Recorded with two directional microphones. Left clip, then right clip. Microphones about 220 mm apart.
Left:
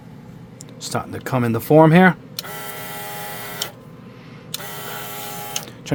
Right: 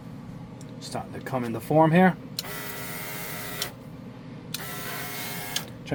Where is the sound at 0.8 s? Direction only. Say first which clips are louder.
Left 9 dB; 50° left (ahead or behind).